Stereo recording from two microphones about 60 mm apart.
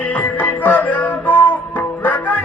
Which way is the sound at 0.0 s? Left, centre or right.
Left.